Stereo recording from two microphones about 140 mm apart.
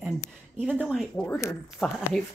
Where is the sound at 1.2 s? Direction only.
10° left (ahead or behind).